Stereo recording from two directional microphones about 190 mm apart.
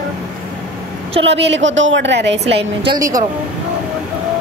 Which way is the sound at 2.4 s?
30° right (ahead or behind).